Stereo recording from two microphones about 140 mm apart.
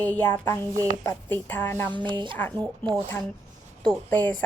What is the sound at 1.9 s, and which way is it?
Speech, 35° right (ahead or behind).